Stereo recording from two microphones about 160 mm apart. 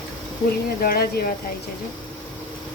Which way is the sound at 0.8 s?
70° left (ahead or behind).